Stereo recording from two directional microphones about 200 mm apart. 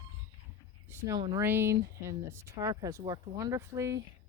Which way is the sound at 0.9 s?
15° right (ahead or behind).